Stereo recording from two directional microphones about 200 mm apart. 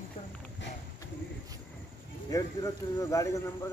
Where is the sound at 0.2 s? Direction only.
25° left (ahead or behind).